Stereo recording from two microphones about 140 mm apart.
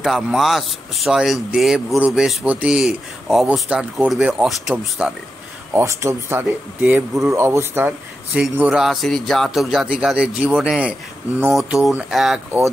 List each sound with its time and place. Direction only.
0.0 s speech: 5° right (ahead or behind)
5.8 s speech: 20° right (ahead or behind); by 12.4 s centre (ahead or behind)